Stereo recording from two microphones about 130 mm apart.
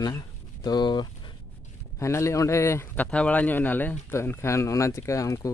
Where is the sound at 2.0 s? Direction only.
20° left (ahead or behind).